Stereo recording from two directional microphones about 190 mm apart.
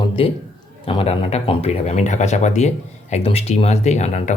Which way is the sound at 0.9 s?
30° left (ahead or behind).